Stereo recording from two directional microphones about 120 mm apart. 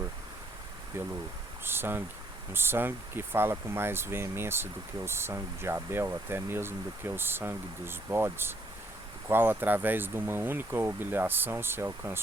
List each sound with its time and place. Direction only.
0.9 s speech: 20° right (ahead or behind)